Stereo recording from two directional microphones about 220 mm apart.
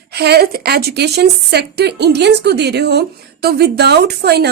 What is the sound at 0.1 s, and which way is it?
A woman's voice, 50° right (ahead or behind).